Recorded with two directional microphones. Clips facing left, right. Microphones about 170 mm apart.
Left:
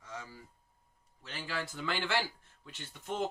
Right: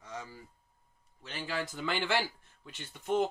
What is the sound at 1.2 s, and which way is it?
Speech, 20° right (ahead or behind).